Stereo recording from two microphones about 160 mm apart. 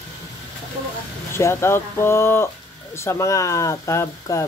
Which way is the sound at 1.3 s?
15° left (ahead or behind).